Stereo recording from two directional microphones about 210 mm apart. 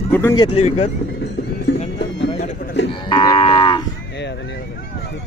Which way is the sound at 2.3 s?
35° left (ahead or behind).